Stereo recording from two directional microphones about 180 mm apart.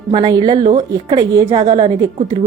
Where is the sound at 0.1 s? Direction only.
25° right (ahead or behind).